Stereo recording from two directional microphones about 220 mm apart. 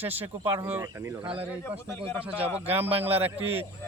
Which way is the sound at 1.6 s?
10° left (ahead or behind).